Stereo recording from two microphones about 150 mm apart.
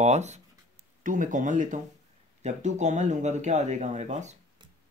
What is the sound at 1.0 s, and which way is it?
Speech, 60° right (ahead or behind).